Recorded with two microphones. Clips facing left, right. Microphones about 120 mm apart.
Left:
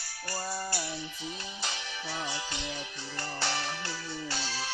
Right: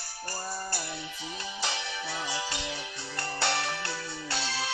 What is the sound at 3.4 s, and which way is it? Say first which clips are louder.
Music: right 4 dB; 70° right (ahead or behind).